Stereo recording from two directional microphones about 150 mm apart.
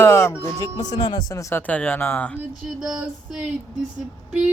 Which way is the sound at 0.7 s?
30° left (ahead or behind).